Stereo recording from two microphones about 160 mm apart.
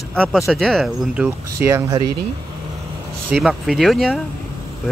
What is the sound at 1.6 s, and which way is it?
Speech, 20° right (ahead or behind).